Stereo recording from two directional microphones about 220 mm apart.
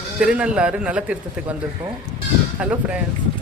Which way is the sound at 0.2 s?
5° right (ahead or behind).